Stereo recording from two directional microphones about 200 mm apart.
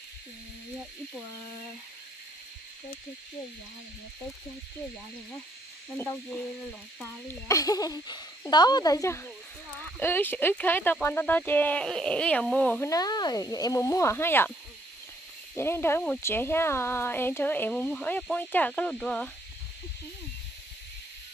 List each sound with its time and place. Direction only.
5.9 s speech: 10° left (ahead or behind)
15.5 s speech: 10° left (ahead or behind)